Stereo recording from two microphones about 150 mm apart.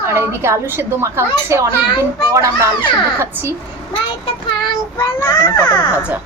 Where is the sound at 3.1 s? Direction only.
15° right (ahead or behind).